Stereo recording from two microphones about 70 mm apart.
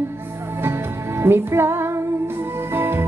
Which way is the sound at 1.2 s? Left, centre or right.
Right.